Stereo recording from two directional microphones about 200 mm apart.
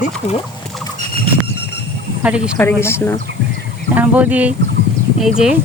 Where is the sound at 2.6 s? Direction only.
10° left (ahead or behind).